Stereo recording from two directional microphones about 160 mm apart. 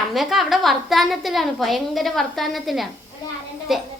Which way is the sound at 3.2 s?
25° left (ahead or behind).